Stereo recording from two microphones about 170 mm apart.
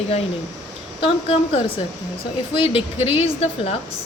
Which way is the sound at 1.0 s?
30° left (ahead or behind).